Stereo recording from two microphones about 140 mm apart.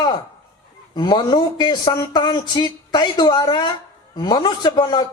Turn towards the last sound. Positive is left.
turn(degrees=30)  # may be behind; listen again after turning